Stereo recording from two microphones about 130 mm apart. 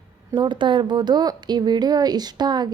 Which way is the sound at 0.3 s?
35° right (ahead or behind).